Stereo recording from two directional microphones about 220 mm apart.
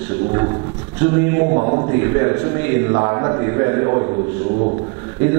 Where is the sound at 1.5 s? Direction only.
30° right (ahead or behind).